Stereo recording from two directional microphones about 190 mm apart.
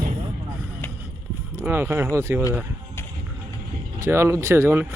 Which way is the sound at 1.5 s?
10° right (ahead or behind).